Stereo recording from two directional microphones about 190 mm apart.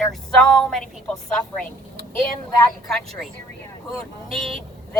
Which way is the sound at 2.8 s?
Centre (ahead or behind).